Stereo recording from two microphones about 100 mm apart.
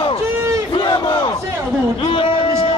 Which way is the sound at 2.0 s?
65° left (ahead or behind).